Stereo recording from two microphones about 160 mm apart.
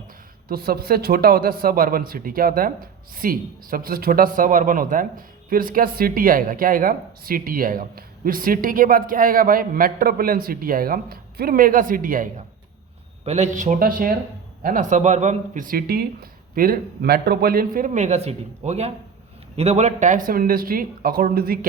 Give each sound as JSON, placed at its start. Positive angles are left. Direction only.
{"t": 0.4, "sound": "a man's voice", "side_deg": -70}
{"t": 13.2, "sound": "a man's voice", "side_deg": -45}